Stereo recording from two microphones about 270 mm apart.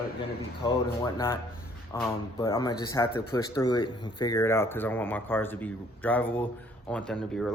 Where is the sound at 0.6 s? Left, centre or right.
Centre.